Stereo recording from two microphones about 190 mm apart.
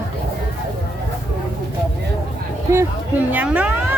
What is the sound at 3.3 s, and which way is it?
Speech, 10° right (ahead or behind).